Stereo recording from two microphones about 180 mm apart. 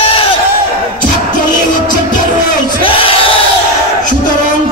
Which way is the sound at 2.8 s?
30° left (ahead or behind).